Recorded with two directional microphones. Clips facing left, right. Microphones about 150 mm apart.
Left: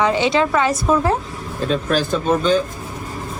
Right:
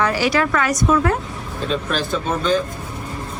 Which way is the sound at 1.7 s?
40° left (ahead or behind).